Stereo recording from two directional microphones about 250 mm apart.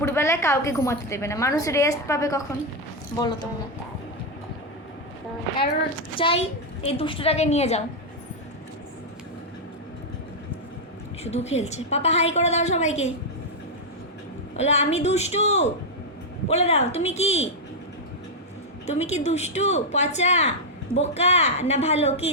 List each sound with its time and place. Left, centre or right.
0.0 s a woman's voice: centre
6.1 s a woman's voice: left
11.2 s a woman's voice: left
14.5 s a woman's voice: left
18.9 s a woman's voice: left